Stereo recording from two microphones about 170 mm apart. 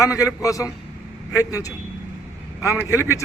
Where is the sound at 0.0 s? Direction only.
20° left (ahead or behind).